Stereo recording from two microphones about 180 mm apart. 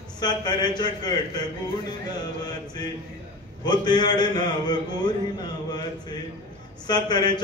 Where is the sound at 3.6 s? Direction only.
25° left (ahead or behind).